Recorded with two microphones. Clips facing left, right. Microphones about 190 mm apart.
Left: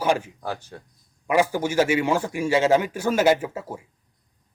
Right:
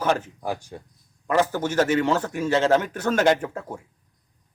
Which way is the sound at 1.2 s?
10° left (ahead or behind).